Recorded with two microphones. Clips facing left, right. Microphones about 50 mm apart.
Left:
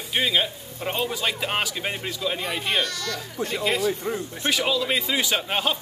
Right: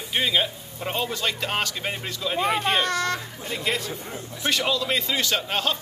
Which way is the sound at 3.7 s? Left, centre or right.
Centre.